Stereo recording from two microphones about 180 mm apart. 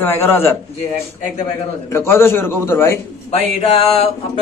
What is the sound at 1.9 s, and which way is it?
A man's voice, 15° left (ahead or behind).